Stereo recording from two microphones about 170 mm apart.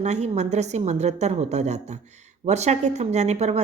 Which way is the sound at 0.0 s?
40° right (ahead or behind).